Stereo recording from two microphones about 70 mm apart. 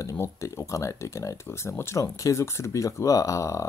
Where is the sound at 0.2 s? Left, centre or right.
Left.